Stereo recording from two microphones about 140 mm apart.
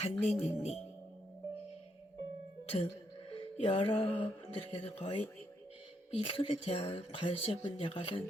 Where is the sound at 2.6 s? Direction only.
45° left (ahead or behind).